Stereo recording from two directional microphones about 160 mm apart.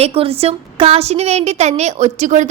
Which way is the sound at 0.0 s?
40° right (ahead or behind).